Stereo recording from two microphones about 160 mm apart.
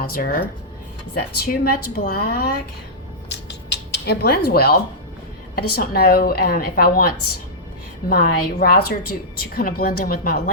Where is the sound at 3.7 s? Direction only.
80° left.